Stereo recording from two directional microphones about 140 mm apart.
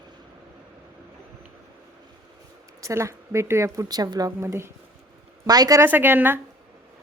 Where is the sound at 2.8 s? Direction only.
20° right (ahead or behind).